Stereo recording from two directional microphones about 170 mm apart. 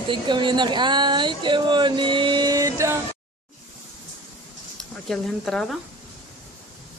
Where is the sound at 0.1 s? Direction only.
30° right (ahead or behind).